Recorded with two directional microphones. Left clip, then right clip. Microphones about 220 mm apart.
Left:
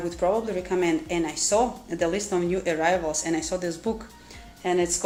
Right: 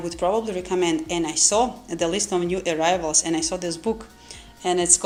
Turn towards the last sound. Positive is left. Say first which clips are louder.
# right 3 dB
turn(degrees=-35)  # may be behind; listen again after turning